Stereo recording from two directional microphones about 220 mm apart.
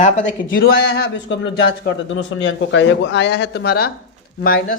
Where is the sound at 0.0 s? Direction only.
35° left (ahead or behind).